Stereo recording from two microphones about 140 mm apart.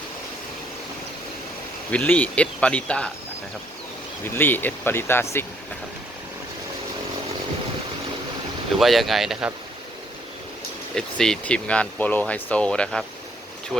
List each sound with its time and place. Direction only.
1.9 s speech: 10° left (ahead or behind)
4.4 s speech: 15° left (ahead or behind)
8.8 s speech: centre (ahead or behind)
10.9 s speech: 5° left (ahead or behind)